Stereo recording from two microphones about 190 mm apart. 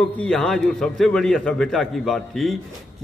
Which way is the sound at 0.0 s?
5° left (ahead or behind).